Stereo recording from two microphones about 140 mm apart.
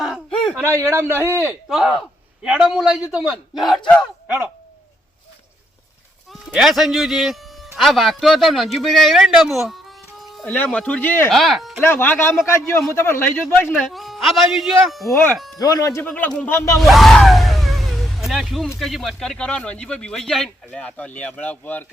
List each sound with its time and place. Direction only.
0.0 s a sound: centre (ahead or behind)
0.9 s a man's voice: 15° right (ahead or behind)
1.7 s a man's voice: centre (ahead or behind)
6.3 s speech: 5° right (ahead or behind)
10.4 s speech: 10° left (ahead or behind)
11.3 s speech: centre (ahead or behind)
11.8 s speech: 15° left (ahead or behind)
13.7 s speech: centre (ahead or behind)
15.1 s speech: 15° left (ahead or behind)
15.5 s speech: 25° left (ahead or behind)
16.0 s speech: 10° left (ahead or behind)
16.8 s vehicle: centre (ahead or behind)
18.8 s speech: centre (ahead or behind)